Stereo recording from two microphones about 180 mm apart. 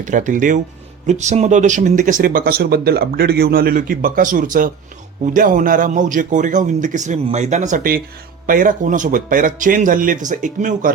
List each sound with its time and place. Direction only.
0.0 s speech: 45° right (ahead or behind)